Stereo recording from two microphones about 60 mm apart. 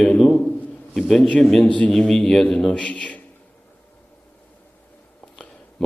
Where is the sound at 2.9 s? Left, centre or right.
Left.